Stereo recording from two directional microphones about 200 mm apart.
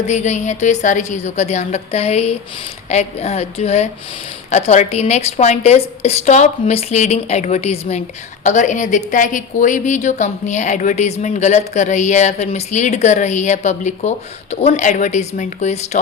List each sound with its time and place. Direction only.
0.0 s a woman's voice: 35° left (ahead or behind)